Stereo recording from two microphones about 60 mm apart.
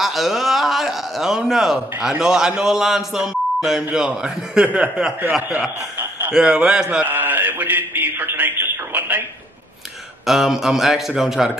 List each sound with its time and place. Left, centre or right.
0.0 s a man's voice: centre
5.9 s a sound: right
6.4 s a man's voice: centre
7.1 s speech: right
10.2 s a man's voice: centre